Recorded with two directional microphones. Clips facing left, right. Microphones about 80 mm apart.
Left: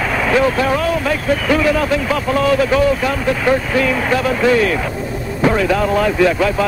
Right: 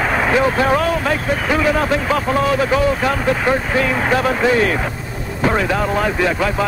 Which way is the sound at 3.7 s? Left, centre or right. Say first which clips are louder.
Left 1 dB; right.